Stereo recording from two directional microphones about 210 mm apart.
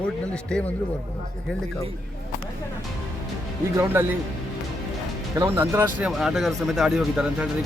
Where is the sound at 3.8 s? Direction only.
10° right (ahead or behind).